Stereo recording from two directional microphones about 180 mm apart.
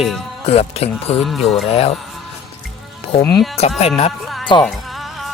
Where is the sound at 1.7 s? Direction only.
35° left (ahead or behind).